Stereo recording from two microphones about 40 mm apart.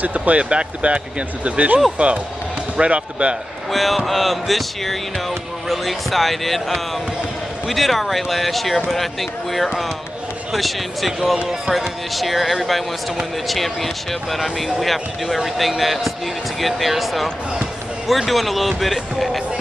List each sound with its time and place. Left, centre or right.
0.0 s speech: right
3.7 s speech: centre